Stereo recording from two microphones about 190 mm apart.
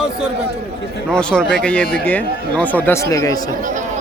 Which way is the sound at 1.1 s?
5° left (ahead or behind).